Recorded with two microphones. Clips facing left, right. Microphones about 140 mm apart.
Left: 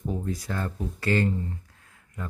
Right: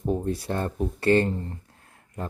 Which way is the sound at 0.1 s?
30° right (ahead or behind).